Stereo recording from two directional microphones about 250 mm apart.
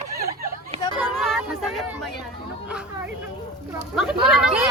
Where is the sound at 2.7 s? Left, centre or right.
Centre.